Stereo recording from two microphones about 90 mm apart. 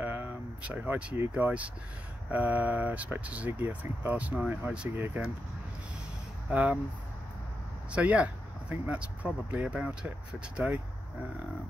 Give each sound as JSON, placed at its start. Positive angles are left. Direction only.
{"t": 0.0, "sound": "a sound", "side_deg": -20}
{"t": 1.3, "sound": "speech", "side_deg": -15}
{"t": 6.5, "sound": "speech", "side_deg": -15}
{"t": 7.9, "sound": "speech", "side_deg": -15}